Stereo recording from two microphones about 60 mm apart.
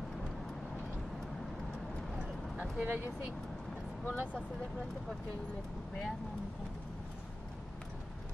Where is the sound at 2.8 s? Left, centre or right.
Right.